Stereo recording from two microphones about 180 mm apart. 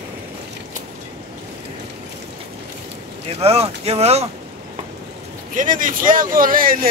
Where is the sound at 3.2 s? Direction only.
35° right (ahead or behind).